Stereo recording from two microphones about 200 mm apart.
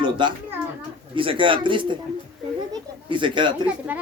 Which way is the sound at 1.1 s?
25° right (ahead or behind).